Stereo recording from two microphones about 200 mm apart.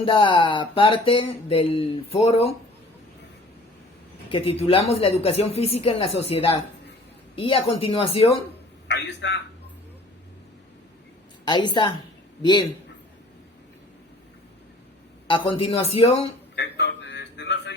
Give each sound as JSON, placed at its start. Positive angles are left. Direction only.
{"t": 0.0, "sound": "music", "side_deg": 25}
{"t": 4.3, "sound": "music", "side_deg": 30}
{"t": 8.9, "sound": "a man's voice", "side_deg": 60}
{"t": 11.4, "sound": "music", "side_deg": 20}
{"t": 15.3, "sound": "music", "side_deg": 25}
{"t": 16.6, "sound": "a man's voice", "side_deg": 60}